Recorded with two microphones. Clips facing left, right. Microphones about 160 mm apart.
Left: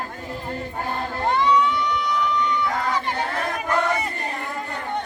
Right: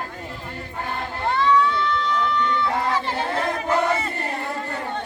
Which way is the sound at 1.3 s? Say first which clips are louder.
Right 1 dB; 15° left (ahead or behind).